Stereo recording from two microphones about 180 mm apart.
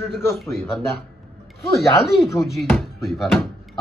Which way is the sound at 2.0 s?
Centre (ahead or behind).